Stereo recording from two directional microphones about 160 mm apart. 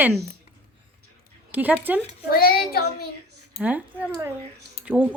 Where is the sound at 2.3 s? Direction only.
70° left (ahead or behind).